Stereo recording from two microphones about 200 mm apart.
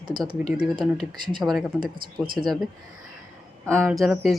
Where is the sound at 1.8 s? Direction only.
25° right (ahead or behind).